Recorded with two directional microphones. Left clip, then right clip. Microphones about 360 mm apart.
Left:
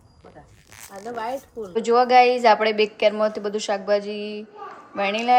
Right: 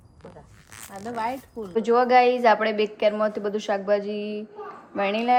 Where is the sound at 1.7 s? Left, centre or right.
Centre.